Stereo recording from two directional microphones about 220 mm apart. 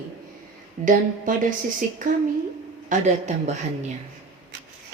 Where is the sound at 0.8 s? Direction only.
35° right (ahead or behind).